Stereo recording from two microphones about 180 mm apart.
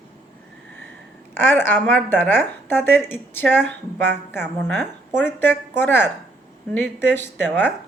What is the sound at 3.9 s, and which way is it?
Speech, 65° right (ahead or behind).